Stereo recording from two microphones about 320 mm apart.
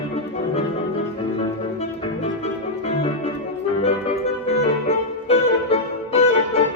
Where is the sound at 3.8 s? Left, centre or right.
Centre.